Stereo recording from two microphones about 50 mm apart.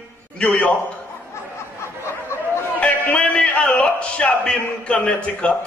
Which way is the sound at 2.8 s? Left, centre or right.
Left.